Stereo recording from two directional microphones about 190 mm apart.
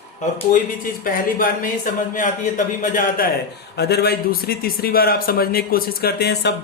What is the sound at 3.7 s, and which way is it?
A man's voice, 60° left (ahead or behind).